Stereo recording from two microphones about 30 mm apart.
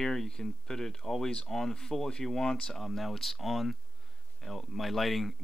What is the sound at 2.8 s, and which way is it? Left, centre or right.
Speech, centre.